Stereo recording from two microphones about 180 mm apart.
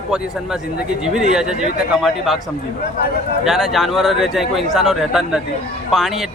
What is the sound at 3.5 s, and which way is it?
Speech, centre (ahead or behind).